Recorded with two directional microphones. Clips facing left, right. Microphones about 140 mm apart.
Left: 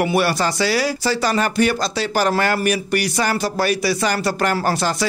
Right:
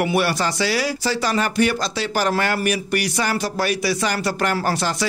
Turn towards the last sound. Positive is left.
turn(degrees=40)  # may be behind; listen again after turning